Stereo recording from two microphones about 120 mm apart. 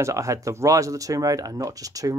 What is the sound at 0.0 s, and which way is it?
Speech, 25° right (ahead or behind).